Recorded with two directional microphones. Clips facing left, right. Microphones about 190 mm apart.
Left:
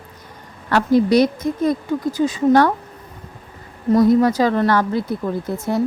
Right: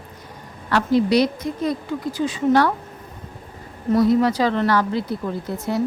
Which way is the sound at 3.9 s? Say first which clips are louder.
Left 3 dB; 45° left (ahead or behind).